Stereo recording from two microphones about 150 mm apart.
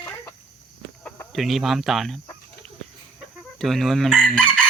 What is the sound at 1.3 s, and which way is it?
Chicken, centre (ahead or behind).